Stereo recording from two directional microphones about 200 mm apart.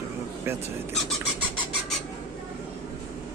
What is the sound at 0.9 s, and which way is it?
Vehicle, centre (ahead or behind).